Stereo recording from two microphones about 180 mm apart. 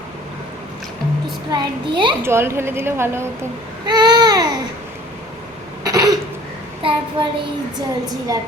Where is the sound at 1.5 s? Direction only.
25° right (ahead or behind).